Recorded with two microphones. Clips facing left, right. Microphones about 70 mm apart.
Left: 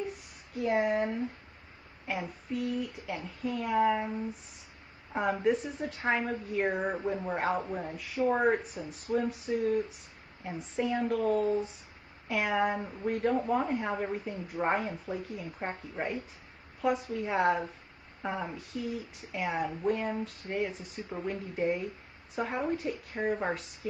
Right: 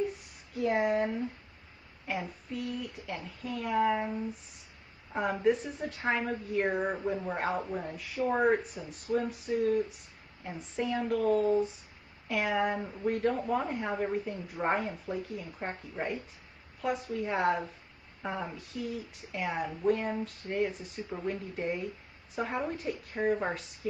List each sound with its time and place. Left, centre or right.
0.6 s speech: centre